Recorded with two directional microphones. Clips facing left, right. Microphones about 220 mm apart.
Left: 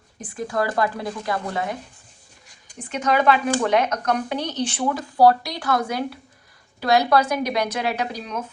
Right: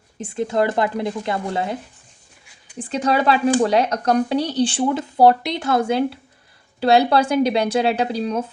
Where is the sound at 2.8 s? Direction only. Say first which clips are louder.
Right 2 dB; 30° right (ahead or behind).